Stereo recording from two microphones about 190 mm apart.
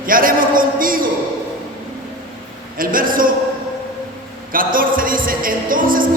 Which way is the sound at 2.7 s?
45° right (ahead or behind).